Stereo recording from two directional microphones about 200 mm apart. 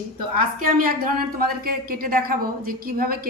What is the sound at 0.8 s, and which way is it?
Speech, 45° right (ahead or behind).